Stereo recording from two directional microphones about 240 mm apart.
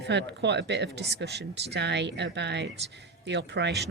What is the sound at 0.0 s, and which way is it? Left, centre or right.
Speech, right.